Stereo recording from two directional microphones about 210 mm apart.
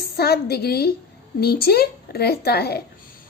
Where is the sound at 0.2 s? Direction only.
50° left (ahead or behind).